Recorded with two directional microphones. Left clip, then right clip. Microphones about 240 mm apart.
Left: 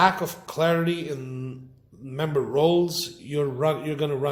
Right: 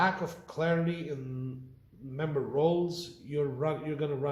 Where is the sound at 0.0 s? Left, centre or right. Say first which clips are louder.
Left 8 dB; left.